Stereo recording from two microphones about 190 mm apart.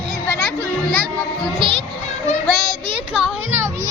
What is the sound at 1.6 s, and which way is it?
Music, 25° right (ahead or behind).